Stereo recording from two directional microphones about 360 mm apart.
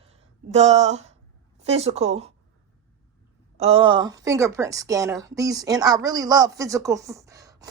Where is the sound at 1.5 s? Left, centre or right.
Centre.